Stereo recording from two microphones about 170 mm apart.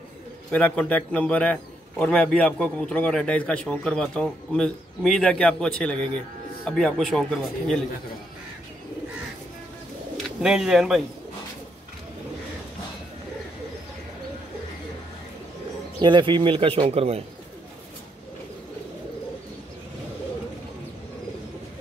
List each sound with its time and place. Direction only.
0.5 s a man's voice: 10° left (ahead or behind)
10.1 s speech: 5° right (ahead or behind)
16.0 s speech: 25° right (ahead or behind)